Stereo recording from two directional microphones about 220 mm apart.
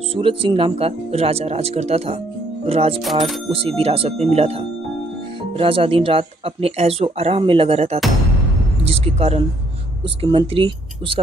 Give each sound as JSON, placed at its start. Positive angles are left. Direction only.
{"t": 0.1, "sound": "speech", "side_deg": -25}